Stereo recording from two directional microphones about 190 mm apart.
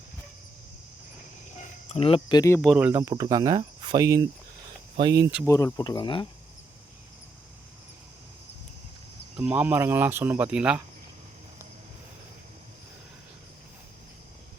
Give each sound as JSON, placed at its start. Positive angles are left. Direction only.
{"t": 1.9, "sound": "speech", "side_deg": 30}
{"t": 2.6, "sound": "speech", "side_deg": -5}
{"t": 5.5, "sound": "speech", "side_deg": 15}
{"t": 9.3, "sound": "speech", "side_deg": -5}